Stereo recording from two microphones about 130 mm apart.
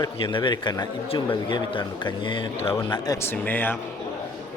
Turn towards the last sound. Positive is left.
turn(degrees=15)  # may be behind; listen again after turning